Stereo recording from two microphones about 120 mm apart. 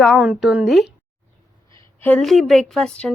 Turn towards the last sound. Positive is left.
turn(degrees=5)  # may be behind; listen again after turning